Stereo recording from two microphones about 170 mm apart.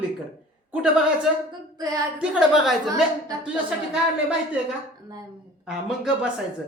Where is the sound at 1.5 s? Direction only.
20° right (ahead or behind).